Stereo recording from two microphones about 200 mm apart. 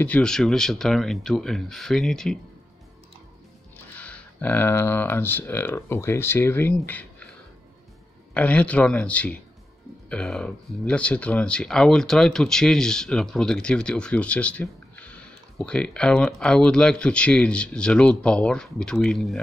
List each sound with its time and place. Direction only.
0.0 s speech: 5° left (ahead or behind)
3.9 s speech: 5° left (ahead or behind)
8.4 s speech: 5° left (ahead or behind)